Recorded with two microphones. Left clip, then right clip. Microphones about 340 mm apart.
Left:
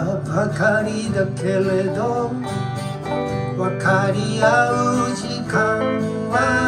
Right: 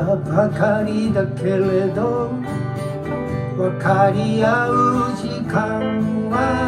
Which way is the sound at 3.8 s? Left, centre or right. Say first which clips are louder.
Right 3 dB; centre.